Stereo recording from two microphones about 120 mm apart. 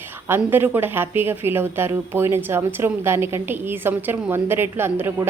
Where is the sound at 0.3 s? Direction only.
20° right (ahead or behind).